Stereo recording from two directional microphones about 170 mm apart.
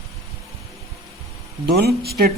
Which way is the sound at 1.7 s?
70° right (ahead or behind).